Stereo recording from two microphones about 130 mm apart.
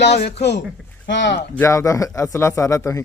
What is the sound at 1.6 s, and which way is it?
Speech, 25° left (ahead or behind).